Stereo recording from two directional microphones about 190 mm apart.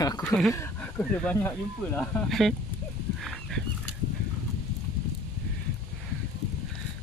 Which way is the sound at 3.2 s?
Centre (ahead or behind).